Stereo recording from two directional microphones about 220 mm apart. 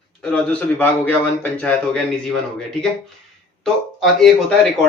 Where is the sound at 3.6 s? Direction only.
Centre (ahead or behind).